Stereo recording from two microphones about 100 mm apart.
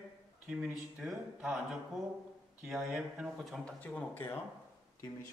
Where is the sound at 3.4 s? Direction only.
10° left (ahead or behind).